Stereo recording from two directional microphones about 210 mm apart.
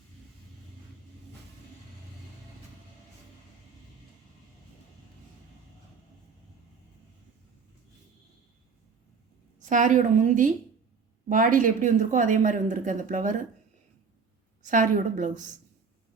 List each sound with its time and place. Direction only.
9.6 s speech: 35° right (ahead or behind)
14.6 s speech: 40° right (ahead or behind)